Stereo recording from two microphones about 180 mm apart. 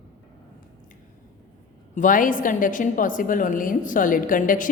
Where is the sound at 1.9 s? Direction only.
45° left (ahead or behind).